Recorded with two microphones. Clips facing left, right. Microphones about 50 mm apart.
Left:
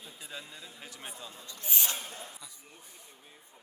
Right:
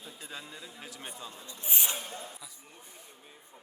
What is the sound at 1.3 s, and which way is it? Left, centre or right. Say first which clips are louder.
Speech: right 1 dB; right.